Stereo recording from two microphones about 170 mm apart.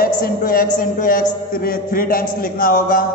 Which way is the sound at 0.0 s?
55° left (ahead or behind).